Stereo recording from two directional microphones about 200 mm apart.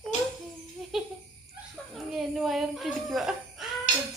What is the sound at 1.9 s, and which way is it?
Speech, centre (ahead or behind).